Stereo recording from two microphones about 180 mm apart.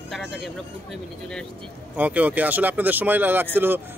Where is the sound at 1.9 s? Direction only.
10° right (ahead or behind).